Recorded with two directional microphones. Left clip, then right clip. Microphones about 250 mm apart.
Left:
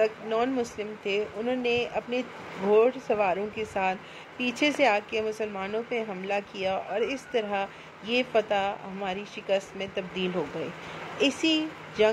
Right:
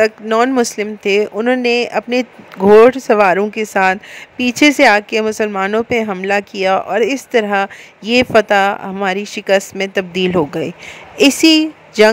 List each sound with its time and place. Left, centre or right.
0.0 s a woman's voice: right